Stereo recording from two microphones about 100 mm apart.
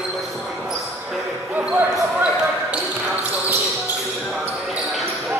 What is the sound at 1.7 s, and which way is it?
Basketball bounce, 10° right (ahead or behind).